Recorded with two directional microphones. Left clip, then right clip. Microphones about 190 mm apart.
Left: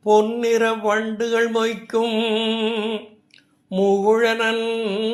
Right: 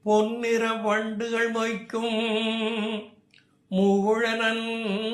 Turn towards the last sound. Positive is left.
turn(degrees=40)  # may be behind; listen again after turning